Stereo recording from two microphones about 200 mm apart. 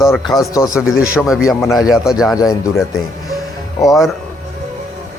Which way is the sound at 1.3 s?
5° right (ahead or behind).